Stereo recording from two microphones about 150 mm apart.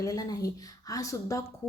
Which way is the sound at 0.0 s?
25° left (ahead or behind).